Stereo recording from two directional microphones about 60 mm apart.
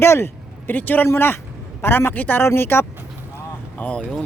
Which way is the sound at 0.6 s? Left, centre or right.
Left.